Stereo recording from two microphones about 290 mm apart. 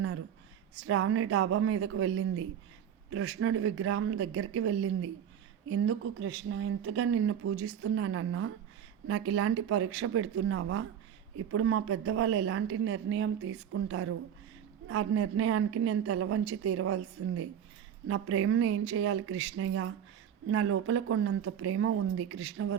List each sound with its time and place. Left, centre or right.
0.9 s speech: right